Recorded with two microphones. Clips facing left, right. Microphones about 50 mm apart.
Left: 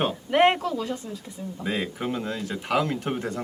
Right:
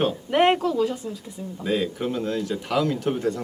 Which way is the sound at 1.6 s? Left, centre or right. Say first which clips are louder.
Right 4 dB; left.